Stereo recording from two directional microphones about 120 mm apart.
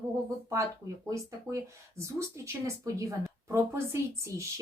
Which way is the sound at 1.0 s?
25° right (ahead or behind).